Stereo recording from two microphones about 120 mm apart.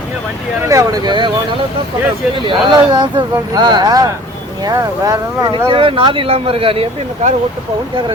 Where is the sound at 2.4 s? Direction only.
40° right (ahead or behind).